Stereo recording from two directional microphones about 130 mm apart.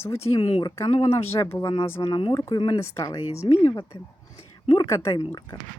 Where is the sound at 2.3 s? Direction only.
25° left (ahead or behind).